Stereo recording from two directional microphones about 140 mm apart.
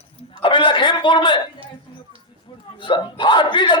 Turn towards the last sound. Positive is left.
turn(degrees=35)  # may be behind; listen again after turning